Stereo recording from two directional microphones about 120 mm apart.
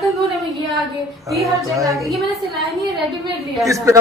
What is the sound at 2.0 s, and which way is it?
Speech, centre (ahead or behind).